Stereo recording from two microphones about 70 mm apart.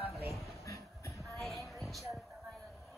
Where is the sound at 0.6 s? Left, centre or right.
Left.